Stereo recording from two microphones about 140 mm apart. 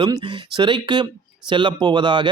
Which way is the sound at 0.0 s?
30° right (ahead or behind).